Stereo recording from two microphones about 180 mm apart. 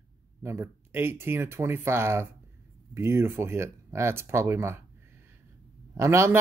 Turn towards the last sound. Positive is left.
turn(degrees=-15)  # may be behind; listen again after turning